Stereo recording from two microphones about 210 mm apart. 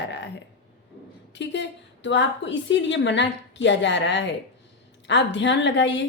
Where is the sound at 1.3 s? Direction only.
55° left (ahead or behind).